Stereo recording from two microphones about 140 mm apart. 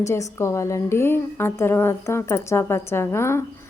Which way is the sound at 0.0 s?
20° left (ahead or behind).